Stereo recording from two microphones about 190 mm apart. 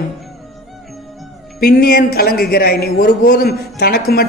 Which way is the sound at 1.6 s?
55° left (ahead or behind).